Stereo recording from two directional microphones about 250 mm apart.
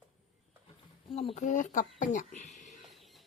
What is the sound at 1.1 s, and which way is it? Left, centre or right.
Speech, left.